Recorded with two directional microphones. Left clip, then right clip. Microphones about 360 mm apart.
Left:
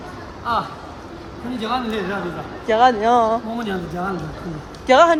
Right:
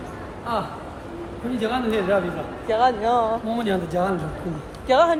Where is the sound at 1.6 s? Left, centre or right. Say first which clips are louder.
Left 1 dB; centre.